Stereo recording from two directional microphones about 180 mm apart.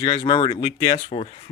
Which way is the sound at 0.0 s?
25° left (ahead or behind).